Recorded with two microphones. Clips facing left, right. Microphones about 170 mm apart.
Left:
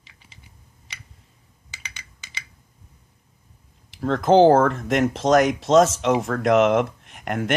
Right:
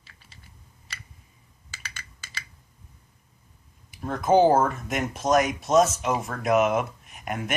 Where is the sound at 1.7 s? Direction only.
20° left (ahead or behind).